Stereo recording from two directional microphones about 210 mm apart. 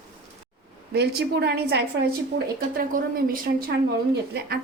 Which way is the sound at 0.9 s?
50° right (ahead or behind).